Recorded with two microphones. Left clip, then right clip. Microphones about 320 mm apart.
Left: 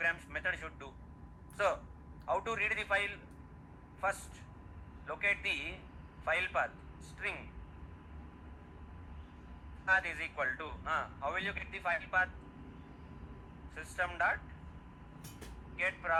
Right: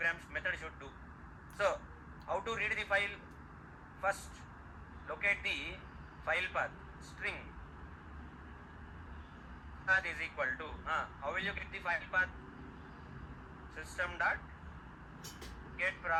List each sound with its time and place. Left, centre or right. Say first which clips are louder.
0.0 s a sound: left 1 dB; centre
2.2 s a man's voice: left 2 dB; centre
5.0 s speech: left 1 dB; centre
9.8 s speech: left 1 dB; centre
13.7 s speech: left 2 dB; centre
15.8 s speech: left 1 dB; centre